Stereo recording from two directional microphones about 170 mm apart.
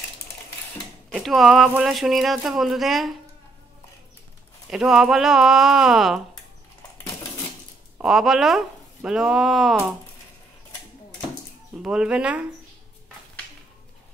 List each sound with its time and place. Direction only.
1.1 s speech: centre (ahead or behind)
4.6 s speech: centre (ahead or behind)
8.0 s speech: centre (ahead or behind)
11.8 s speech: 5° right (ahead or behind)